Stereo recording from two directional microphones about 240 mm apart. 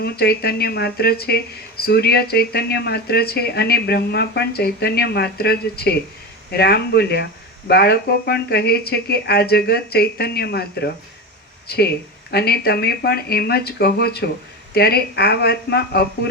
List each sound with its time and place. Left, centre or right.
0.0 s speech: left
12.3 s speech: left